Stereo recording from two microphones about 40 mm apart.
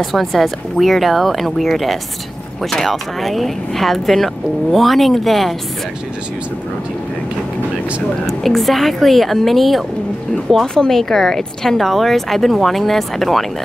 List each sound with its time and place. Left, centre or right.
0.0 s speech: centre
8.3 s speech: centre